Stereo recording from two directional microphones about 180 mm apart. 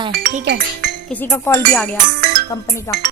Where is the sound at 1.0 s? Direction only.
10° left (ahead or behind).